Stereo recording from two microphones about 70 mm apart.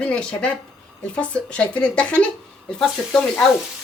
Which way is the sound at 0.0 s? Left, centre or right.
Centre.